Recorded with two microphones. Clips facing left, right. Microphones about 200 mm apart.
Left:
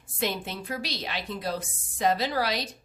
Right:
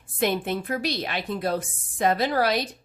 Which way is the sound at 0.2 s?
55° right (ahead or behind).